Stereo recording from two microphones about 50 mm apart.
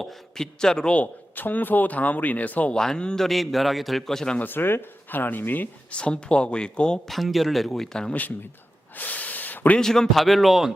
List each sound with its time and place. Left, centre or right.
0.0 s a man's voice: centre
0.9 s speech: left
2.7 s a man's voice: centre
3.2 s a man's voice: centre
4.4 s speech: left
5.9 s speech: centre
7.1 s a man's voice: centre
9.0 s a sound: left
9.7 s a man's voice: centre